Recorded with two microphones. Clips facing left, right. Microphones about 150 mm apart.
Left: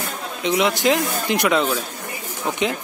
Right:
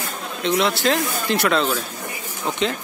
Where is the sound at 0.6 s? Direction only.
15° left (ahead or behind).